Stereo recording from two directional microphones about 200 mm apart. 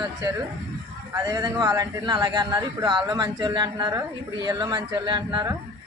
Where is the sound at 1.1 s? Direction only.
15° right (ahead or behind).